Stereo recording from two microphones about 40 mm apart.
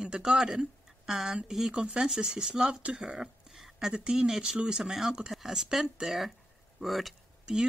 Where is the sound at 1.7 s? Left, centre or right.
Right.